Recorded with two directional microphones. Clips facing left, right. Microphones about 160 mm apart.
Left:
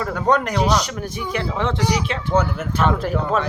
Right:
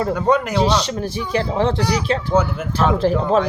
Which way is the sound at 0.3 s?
5° right (ahead or behind).